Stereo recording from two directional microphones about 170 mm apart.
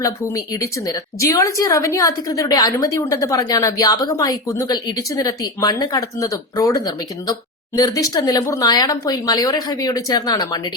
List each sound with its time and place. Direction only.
0.0 s a woman's voice: 20° left (ahead or behind)